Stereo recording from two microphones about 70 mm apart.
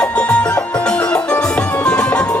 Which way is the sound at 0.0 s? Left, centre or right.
Centre.